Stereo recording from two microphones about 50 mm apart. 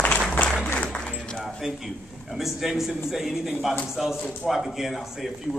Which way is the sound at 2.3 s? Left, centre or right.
Centre.